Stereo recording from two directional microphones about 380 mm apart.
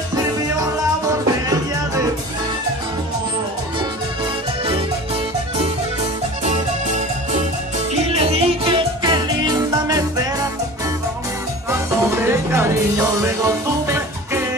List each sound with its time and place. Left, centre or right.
0.2 s music: centre
6.4 s music: centre
11.7 s music: centre